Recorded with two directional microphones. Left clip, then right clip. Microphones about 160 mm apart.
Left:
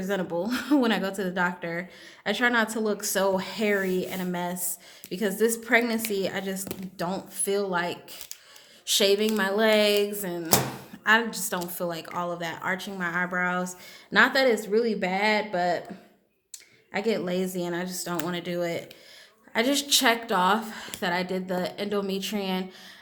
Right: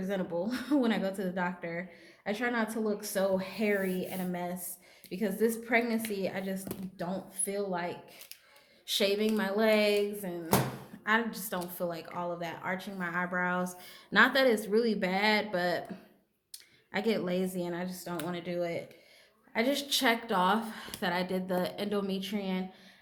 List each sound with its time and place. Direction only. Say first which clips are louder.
0.0 s speech: left 5 dB; 30° left (ahead or behind)
8.9 s a woman's voice: left 6 dB; 30° left (ahead or behind)
11.0 s a woman's voice: left 8 dB; 30° left (ahead or behind); by 15.8 s 5° left (ahead or behind)
16.9 s a woman's voice: left 4 dB; 10° left (ahead or behind); by 22.6 s 30° left (ahead or behind)